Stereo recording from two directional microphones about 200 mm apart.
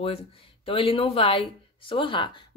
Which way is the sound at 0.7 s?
25° left (ahead or behind).